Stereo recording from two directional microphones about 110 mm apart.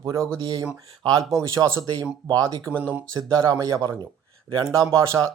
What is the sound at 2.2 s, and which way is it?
Speech, 35° right (ahead or behind).